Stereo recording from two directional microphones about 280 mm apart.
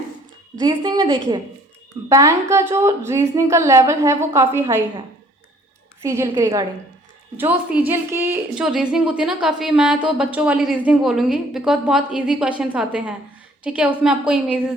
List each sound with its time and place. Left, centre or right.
0.6 s a woman's voice: centre